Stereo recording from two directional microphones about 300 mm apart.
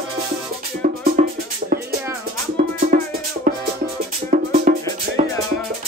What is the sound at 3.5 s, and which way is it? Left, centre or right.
Music, right.